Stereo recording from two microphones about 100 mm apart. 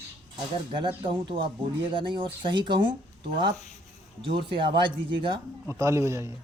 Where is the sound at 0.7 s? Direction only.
55° right (ahead or behind).